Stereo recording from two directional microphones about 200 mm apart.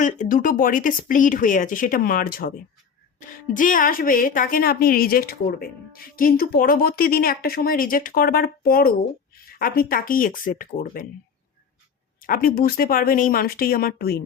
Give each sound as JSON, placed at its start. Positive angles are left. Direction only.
{"t": 0.0, "sound": "a woman's voice", "side_deg": 40}
{"t": 12.2, "sound": "a woman's voice", "side_deg": 45}